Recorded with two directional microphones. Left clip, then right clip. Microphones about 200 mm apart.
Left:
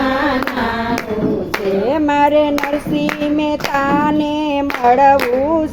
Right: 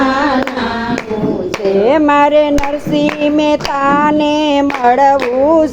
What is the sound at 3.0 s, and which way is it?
Child singing, 15° right (ahead or behind).